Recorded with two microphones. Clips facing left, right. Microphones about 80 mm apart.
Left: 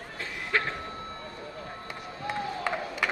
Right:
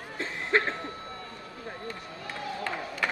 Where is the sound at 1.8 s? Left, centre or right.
Centre.